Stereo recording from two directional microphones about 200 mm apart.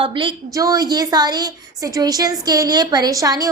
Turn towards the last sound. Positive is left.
turn(degrees=-15)  # may be behind; listen again after turning